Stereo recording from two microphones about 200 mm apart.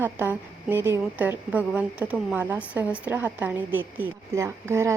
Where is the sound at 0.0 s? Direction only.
10° right (ahead or behind).